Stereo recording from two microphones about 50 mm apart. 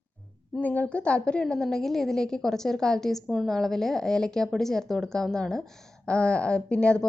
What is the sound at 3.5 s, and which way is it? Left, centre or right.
A woman's voice, centre.